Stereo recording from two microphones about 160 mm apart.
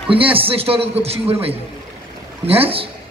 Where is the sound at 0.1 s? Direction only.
35° right (ahead or behind).